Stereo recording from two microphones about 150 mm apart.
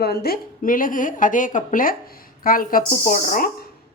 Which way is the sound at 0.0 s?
90° left.